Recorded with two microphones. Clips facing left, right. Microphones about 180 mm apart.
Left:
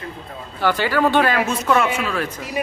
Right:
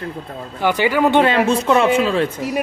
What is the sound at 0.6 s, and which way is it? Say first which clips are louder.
Speech: right 2 dB; 15° right (ahead or behind).